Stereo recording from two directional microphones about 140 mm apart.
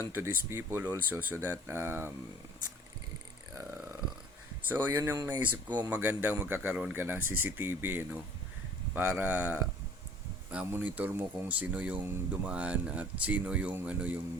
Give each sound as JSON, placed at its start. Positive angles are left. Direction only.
{"t": 0.1, "sound": "speech", "side_deg": -15}
{"t": 4.7, "sound": "speech", "side_deg": -15}